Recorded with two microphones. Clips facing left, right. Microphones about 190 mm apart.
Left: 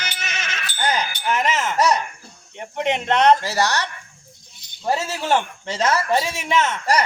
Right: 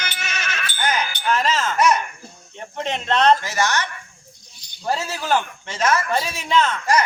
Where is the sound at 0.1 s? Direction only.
20° left (ahead or behind).